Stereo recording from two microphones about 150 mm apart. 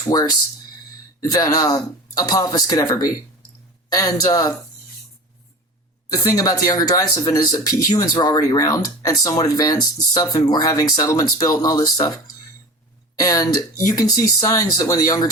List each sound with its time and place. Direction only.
0.0 s speech: 25° left (ahead or behind)
6.2 s speech: 25° left (ahead or behind)